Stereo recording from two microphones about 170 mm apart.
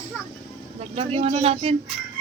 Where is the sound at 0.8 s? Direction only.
35° right (ahead or behind).